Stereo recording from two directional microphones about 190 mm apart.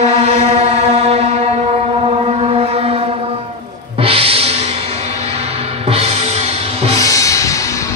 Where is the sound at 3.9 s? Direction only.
30° right (ahead or behind).